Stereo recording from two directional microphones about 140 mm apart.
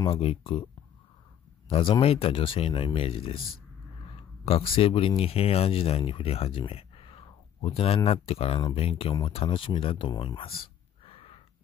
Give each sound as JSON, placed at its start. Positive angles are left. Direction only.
{"t": 0.1, "sound": "speech", "side_deg": 40}
{"t": 1.7, "sound": "speech", "side_deg": 40}
{"t": 4.5, "sound": "speech", "side_deg": 40}